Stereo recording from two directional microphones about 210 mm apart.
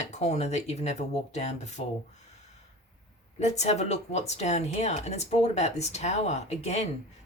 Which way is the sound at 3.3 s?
30° left (ahead or behind).